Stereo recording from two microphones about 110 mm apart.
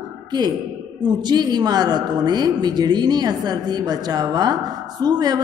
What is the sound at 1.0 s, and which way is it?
A woman's voice, 40° right (ahead or behind).